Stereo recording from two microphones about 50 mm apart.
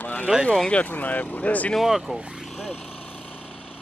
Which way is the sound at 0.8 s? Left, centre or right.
Left.